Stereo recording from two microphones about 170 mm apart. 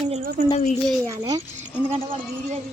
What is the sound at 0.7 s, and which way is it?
Speech, 5° left (ahead or behind).